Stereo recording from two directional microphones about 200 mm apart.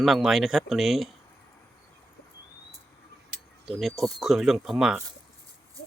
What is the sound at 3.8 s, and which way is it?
Speech, centre (ahead or behind).